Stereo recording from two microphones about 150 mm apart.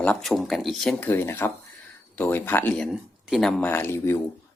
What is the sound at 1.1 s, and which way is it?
Speech, 15° left (ahead or behind).